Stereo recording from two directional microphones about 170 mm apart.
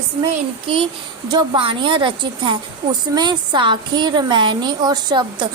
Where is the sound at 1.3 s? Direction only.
25° right (ahead or behind).